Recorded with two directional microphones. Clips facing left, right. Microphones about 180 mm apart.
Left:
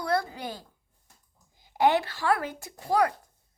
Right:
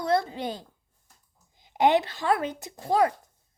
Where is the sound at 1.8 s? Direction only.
20° right (ahead or behind).